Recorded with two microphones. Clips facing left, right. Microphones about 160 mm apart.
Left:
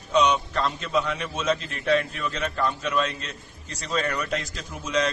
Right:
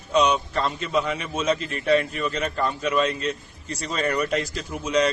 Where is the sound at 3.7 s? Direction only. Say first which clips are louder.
Right 2 dB; 10° right (ahead or behind).